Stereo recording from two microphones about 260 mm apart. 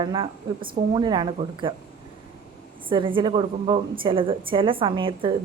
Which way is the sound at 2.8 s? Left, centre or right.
Centre.